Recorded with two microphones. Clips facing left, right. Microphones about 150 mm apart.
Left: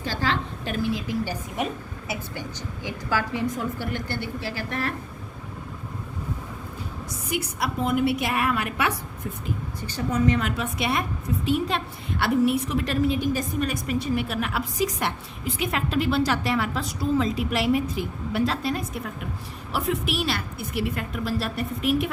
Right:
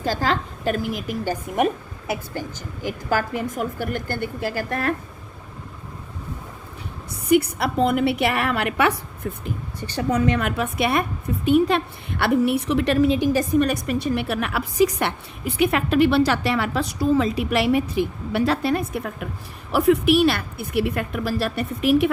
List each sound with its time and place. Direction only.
0.0 s a sound: 45° right (ahead or behind)
1.5 s a woman's voice: 55° right (ahead or behind)
3.5 s a woman's voice: 45° right (ahead or behind)
7.1 s a woman's voice: 60° right (ahead or behind); by 13.2 s 80° right
13.3 s a woman's voice: 65° right (ahead or behind)